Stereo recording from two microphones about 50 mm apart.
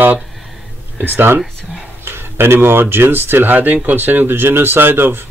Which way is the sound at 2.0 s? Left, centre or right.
Right.